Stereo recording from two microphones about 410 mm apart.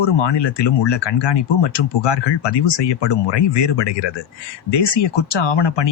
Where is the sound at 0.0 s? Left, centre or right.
Left.